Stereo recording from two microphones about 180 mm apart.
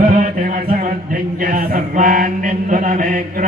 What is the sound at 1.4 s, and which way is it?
Chant, 50° right (ahead or behind).